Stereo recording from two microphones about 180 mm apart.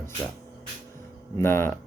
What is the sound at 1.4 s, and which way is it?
Speech, 15° left (ahead or behind).